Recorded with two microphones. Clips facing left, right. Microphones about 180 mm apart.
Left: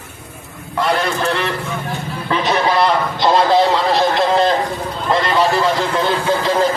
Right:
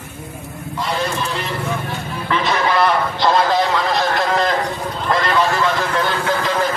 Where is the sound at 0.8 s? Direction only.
70° left (ahead or behind).